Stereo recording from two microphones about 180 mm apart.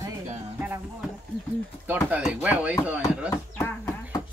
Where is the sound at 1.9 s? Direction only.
5° right (ahead or behind).